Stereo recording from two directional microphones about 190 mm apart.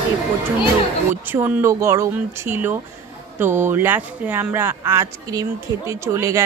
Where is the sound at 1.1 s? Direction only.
10° right (ahead or behind).